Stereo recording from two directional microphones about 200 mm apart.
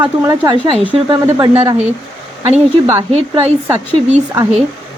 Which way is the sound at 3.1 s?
30° right (ahead or behind).